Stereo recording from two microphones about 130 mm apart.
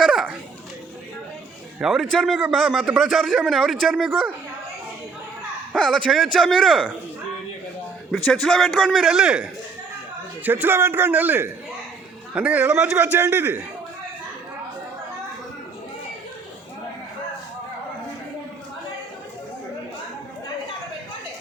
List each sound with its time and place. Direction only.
0.0 s children playing: 5° right (ahead or behind)
1.8 s a man's voice: centre (ahead or behind)
5.7 s a man's voice: 5° left (ahead or behind)
8.2 s a man's voice: 5° left (ahead or behind)
10.4 s a man's voice: 15° right (ahead or behind)